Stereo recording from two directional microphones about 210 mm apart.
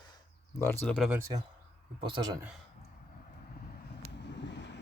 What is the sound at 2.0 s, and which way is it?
Speech, 20° right (ahead or behind).